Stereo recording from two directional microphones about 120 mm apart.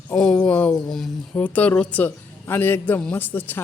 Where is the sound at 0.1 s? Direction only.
10° left (ahead or behind).